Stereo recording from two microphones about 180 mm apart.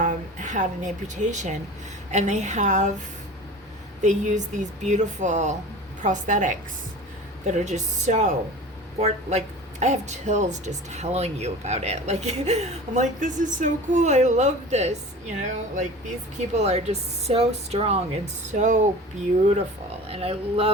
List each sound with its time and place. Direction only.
0.0 s a woman's voice: 45° right (ahead or behind)
4.0 s a woman's voice: 40° right (ahead or behind)
20.1 s speech: 35° right (ahead or behind)